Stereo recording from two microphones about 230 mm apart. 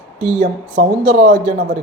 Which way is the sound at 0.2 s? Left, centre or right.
Right.